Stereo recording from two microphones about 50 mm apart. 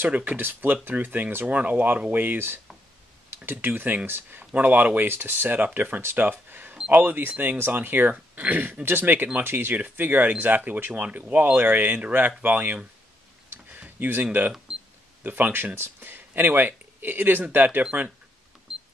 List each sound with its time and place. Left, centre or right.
0.0 s speech: right
0.4 s speech: right
8.8 s speech: right
13.7 s a sound: right
13.9 s speech: right